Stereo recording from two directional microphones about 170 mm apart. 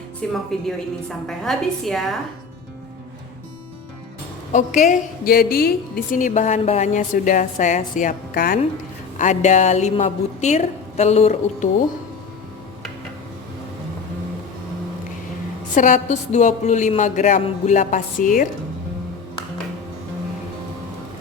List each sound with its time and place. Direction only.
0.2 s a woman's voice: 5° left (ahead or behind)
4.5 s a woman's voice: 45° left (ahead or behind)
9.1 s a woman's voice: 45° left (ahead or behind)
15.7 s a woman's voice: 45° left (ahead or behind)